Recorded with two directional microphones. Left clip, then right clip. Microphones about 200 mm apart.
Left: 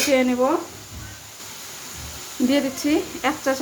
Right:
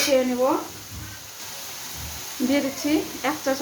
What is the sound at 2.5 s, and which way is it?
Speech, 25° left (ahead or behind).